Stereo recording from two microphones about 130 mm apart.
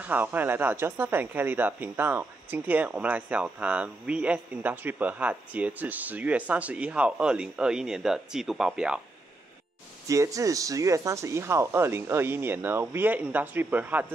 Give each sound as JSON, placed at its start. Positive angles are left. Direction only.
{"t": 0.0, "sound": "speech", "side_deg": -15}
{"t": 10.0, "sound": "speech", "side_deg": -25}